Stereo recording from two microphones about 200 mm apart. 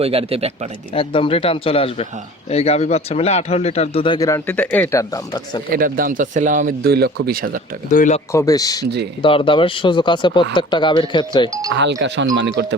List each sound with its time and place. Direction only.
0.0 s speech: 30° right (ahead or behind)
0.9 s speech: 25° left (ahead or behind)
5.7 s speech: 45° right (ahead or behind)
7.9 s speech: 40° left (ahead or behind)
8.3 s a man's voice: 15° left (ahead or behind)
11.7 s speech: 60° right (ahead or behind)